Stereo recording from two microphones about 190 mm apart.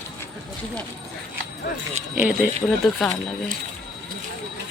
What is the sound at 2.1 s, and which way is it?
Speech, 5° right (ahead or behind).